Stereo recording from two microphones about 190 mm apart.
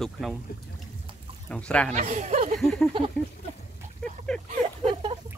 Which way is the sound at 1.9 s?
40° right (ahead or behind).